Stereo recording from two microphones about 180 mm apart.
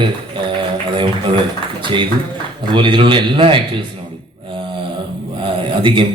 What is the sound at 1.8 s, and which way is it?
A man's voice, 25° right (ahead or behind).